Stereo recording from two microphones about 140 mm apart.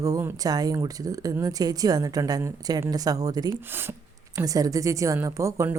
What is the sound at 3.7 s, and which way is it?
A woman's voice, 15° right (ahead or behind).